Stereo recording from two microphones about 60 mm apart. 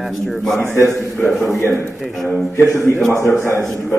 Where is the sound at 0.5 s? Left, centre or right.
Left.